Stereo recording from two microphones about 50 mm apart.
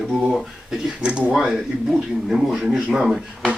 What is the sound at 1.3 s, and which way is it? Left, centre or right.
Speech, centre.